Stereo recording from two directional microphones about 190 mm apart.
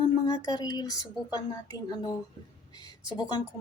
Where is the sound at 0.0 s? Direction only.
20° left (ahead or behind).